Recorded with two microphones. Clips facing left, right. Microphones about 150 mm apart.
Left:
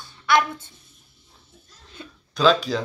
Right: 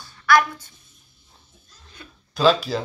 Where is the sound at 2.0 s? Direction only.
25° left (ahead or behind).